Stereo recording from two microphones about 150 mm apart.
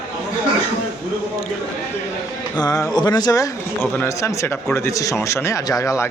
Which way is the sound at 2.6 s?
25° left (ahead or behind).